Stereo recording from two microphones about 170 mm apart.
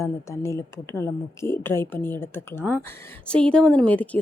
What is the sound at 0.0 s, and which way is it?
Speech, 15° left (ahead or behind).